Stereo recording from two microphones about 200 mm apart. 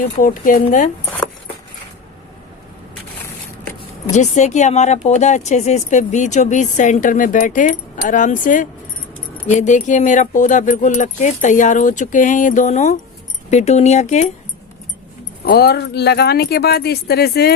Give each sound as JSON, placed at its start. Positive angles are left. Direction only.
{"t": 0.2, "sound": "speech", "side_deg": 40}
{"t": 4.1, "sound": "speech", "side_deg": 35}
{"t": 15.4, "sound": "speech", "side_deg": 50}